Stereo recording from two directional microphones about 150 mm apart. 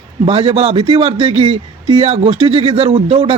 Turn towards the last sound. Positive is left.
turn(degrees=-40)  # may be behind; listen again after turning